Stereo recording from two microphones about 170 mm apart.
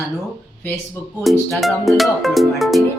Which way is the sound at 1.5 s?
Centre (ahead or behind).